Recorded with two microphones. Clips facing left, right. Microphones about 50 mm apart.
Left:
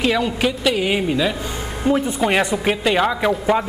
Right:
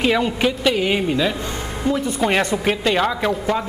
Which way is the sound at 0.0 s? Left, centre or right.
Centre.